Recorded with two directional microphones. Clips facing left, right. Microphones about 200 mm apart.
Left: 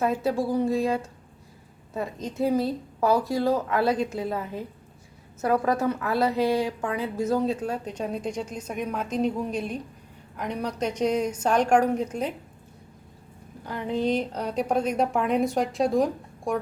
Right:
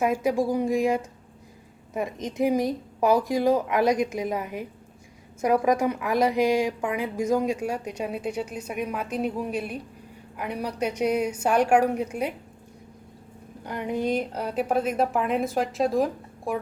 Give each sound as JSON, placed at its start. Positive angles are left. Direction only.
{"t": 0.0, "sound": "a woman's voice", "side_deg": -15}
{"t": 13.7, "sound": "a woman's voice", "side_deg": -15}